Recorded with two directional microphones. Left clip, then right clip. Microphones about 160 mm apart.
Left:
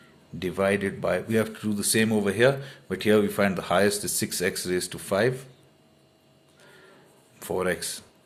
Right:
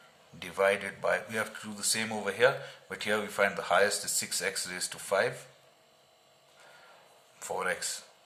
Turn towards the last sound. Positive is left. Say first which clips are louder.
# left 5 dB
turn(degrees=25)  # may be behind; listen again after turning